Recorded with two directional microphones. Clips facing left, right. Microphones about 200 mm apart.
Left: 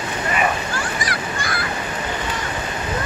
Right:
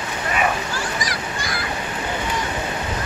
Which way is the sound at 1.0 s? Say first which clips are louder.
Left 2 dB; 55° left (ahead or behind).